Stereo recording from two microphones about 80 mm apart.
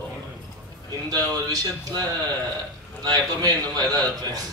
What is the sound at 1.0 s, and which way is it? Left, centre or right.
Speech, right.